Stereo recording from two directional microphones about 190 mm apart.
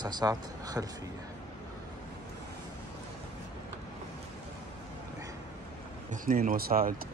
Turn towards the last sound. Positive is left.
turn(degrees=-50)  # may be behind; listen again after turning